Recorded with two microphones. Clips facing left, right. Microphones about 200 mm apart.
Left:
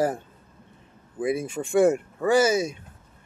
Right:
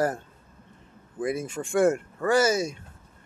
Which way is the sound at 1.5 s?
20° left (ahead or behind).